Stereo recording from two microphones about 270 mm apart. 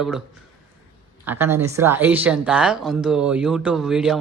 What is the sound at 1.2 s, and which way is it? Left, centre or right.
A woman's voice, centre.